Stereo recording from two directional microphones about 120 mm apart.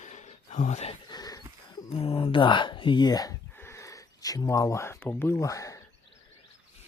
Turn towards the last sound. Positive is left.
turn(degrees=25)  # may be behind; listen again after turning